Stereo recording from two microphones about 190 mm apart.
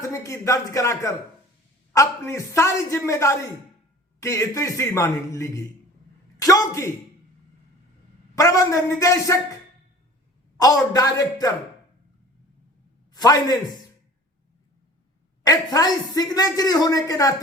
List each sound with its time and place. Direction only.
0.0 s a man's voice: 15° left (ahead or behind)
8.4 s a man's voice: 15° left (ahead or behind)
10.6 s speech: 20° left (ahead or behind)
13.1 s speech: 20° left (ahead or behind)
15.4 s speech: 20° left (ahead or behind)